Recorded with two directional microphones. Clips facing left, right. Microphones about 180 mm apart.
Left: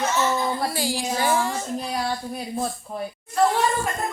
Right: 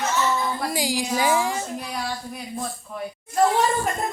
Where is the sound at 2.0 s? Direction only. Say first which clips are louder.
Left 3 dB; 35° left (ahead or behind).